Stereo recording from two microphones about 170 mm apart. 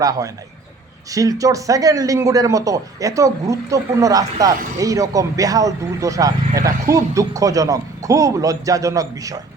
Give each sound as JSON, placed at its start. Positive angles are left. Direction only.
{"t": 0.0, "sound": "speech", "side_deg": -20}